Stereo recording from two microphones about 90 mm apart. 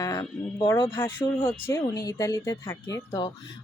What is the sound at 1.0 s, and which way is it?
Speech, 20° left (ahead or behind).